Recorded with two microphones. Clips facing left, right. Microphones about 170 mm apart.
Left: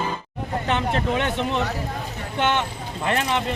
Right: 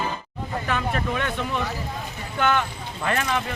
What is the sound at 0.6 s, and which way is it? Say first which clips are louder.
Speech: left 3 dB; 25° left (ahead or behind).